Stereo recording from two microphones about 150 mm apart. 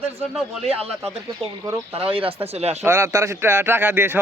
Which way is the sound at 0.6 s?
40° right (ahead or behind).